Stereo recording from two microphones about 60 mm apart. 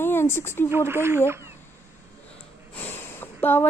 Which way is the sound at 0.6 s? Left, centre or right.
Right.